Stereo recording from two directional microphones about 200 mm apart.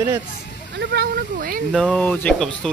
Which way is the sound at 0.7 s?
55° right (ahead or behind).